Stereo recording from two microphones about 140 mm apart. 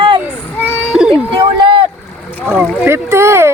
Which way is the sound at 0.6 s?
10° right (ahead or behind).